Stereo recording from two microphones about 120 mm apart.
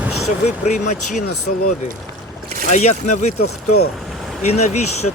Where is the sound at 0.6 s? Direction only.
80° left.